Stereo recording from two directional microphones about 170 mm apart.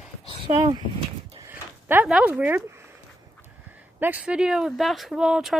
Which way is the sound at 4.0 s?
10° right (ahead or behind).